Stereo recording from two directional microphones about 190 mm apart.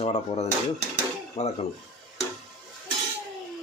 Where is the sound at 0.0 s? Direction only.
35° left (ahead or behind).